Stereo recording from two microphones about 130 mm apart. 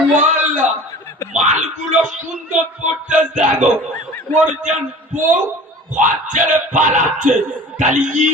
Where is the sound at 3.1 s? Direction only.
70° right (ahead or behind).